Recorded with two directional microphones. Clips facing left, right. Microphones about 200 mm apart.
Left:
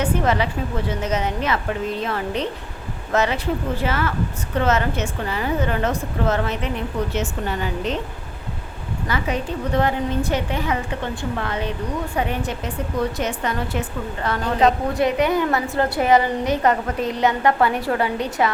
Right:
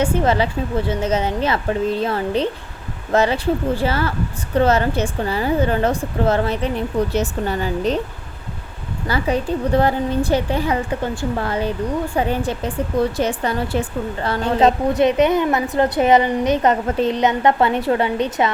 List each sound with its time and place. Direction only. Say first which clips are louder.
0.0 s a woman's voice: right 3 dB; 30° right (ahead or behind)
9.0 s a woman's voice: right 5 dB; 35° right (ahead or behind)